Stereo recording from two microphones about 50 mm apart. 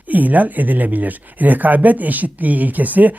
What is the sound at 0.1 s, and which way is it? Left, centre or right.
Speech, right.